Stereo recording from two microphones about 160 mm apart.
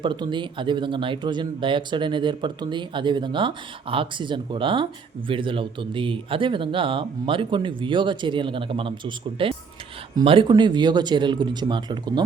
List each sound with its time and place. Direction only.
0.0 s a man's voice: 30° right (ahead or behind)